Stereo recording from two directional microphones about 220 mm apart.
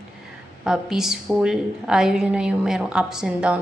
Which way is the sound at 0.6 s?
Centre (ahead or behind).